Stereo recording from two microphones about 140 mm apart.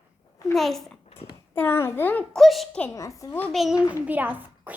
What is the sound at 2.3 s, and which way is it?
Speech, centre (ahead or behind).